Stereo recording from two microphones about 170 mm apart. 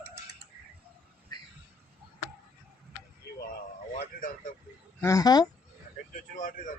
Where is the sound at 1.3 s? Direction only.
25° left (ahead or behind).